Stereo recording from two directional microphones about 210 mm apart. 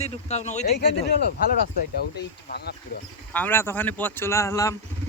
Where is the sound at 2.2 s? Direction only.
50° left (ahead or behind).